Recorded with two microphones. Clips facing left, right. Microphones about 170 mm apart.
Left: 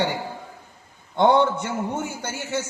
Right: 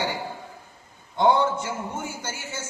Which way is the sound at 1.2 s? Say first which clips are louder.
Left 3 dB; 60° left (ahead or behind).